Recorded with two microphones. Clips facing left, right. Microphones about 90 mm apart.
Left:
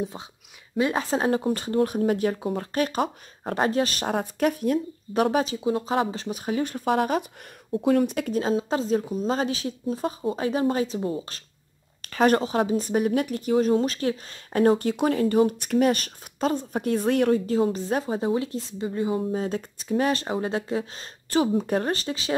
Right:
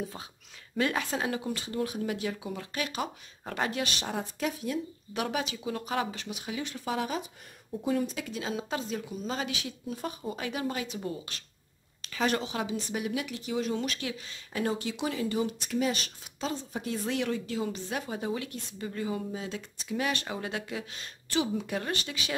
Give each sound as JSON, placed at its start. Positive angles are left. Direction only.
{"t": 0.9, "sound": "a woman's voice", "side_deg": 35}
{"t": 5.1, "sound": "speech", "side_deg": 40}
{"t": 5.6, "sound": "a woman's voice", "side_deg": 25}
{"t": 7.7, "sound": "speech", "side_deg": 70}
{"t": 8.3, "sound": "speech", "side_deg": 40}
{"t": 12.0, "sound": "a woman's voice", "side_deg": 50}
{"t": 19.3, "sound": "speech", "side_deg": 45}